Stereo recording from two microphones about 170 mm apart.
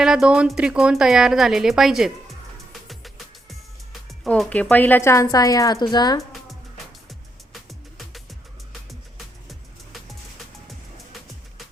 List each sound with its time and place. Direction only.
0.0 s speech: 5° right (ahead or behind)
2.8 s music: centre (ahead or behind)
4.2 s a woman's voice: 5° left (ahead or behind); by 6.2 s 25° left (ahead or behind)
7.1 s music: centre (ahead or behind)